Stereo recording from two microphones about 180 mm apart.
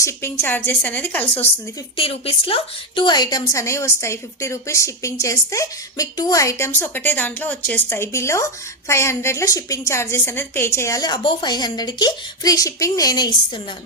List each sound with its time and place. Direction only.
0.0 s a woman's voice: 15° left (ahead or behind)
2.0 s a woman's voice: 30° left (ahead or behind)